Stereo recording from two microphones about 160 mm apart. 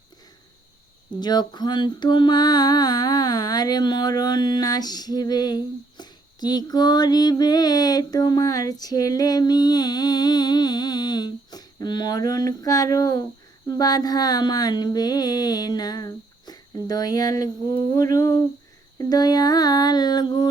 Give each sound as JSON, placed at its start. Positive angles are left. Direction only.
{"t": 1.2, "sound": "mantra", "side_deg": 25}